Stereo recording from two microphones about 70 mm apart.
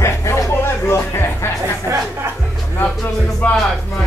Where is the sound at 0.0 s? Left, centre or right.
Left.